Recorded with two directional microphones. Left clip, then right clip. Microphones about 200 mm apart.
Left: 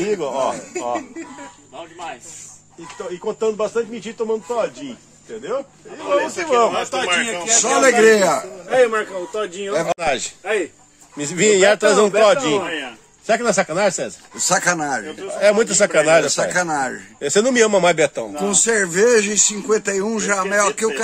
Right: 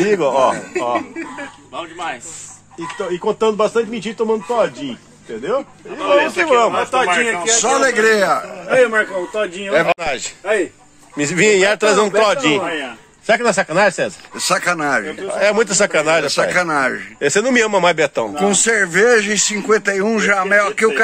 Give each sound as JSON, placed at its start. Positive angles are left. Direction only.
{"t": 0.0, "sound": "a man's voice", "side_deg": -25}
{"t": 3.3, "sound": "speech", "side_deg": -40}
{"t": 6.1, "sound": "a man's voice", "side_deg": -35}
{"t": 6.7, "sound": "a man's voice", "side_deg": 75}
{"t": 7.4, "sound": "a man's voice", "side_deg": 0}
{"t": 8.9, "sound": "speech", "side_deg": 35}
{"t": 9.8, "sound": "a man's voice", "side_deg": 0}
{"t": 14.3, "sound": "speech", "side_deg": 35}
{"t": 15.2, "sound": "a man's voice", "side_deg": 0}
{"t": 16.3, "sound": "speech", "side_deg": 40}
{"t": 17.2, "sound": "a man's voice", "side_deg": 5}
{"t": 18.3, "sound": "speech", "side_deg": 30}